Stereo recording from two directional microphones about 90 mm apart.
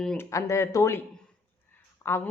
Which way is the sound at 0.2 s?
35° left (ahead or behind).